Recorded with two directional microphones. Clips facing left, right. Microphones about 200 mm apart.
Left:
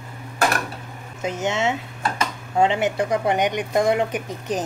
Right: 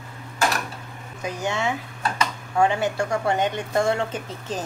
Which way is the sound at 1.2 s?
20° left (ahead or behind).